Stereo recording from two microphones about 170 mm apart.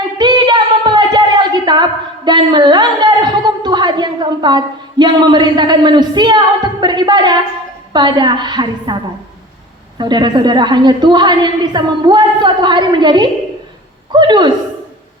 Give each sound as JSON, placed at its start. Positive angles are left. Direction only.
{"t": 0.2, "sound": "a woman's voice", "side_deg": -25}
{"t": 10.0, "sound": "a woman's voice", "side_deg": -25}